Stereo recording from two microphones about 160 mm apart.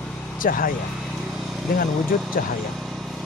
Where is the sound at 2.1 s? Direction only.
60° left (ahead or behind).